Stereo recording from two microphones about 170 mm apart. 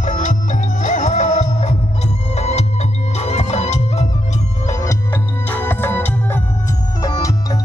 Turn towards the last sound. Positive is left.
turn(degrees=20)  # may be behind; listen again after turning